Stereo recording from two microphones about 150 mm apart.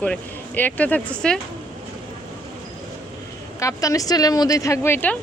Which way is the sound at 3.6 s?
25° left (ahead or behind).